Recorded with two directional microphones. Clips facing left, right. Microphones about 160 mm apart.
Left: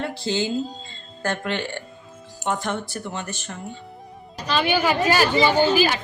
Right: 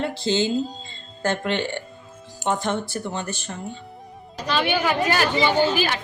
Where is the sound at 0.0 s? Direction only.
25° right (ahead or behind).